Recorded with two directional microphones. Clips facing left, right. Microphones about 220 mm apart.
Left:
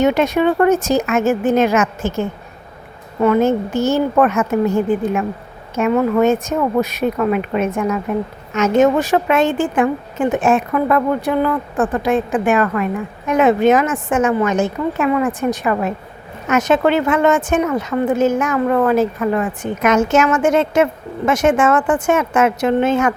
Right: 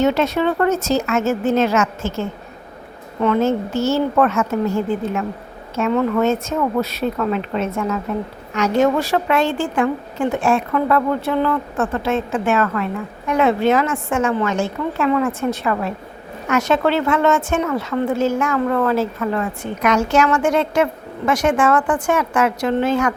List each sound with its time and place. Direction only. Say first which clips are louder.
0.0 s speech: left 3 dB; 15° left (ahead or behind)